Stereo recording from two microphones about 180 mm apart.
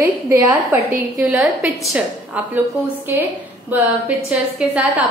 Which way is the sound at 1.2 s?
5° right (ahead or behind).